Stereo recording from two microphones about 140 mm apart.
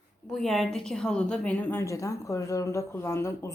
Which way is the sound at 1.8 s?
20° left (ahead or behind).